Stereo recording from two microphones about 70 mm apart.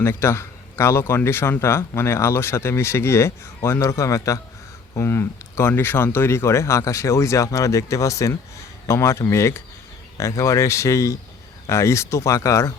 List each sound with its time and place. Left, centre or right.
0.0 s speech: left
4.9 s speech: left